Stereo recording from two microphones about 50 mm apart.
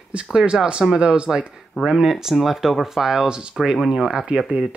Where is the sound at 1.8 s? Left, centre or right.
Centre.